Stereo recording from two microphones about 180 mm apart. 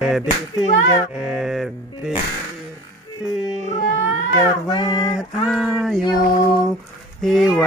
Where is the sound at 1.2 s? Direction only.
5° right (ahead or behind).